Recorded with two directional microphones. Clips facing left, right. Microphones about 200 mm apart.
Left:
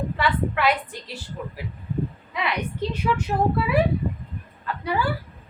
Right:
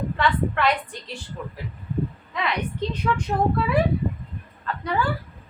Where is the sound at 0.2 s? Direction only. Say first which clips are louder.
Right 1 dB; 5° left (ahead or behind).